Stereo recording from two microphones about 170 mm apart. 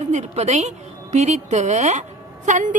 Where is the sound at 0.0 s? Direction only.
40° right (ahead or behind).